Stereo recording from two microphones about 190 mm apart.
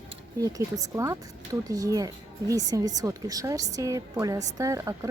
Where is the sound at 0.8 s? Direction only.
15° right (ahead or behind).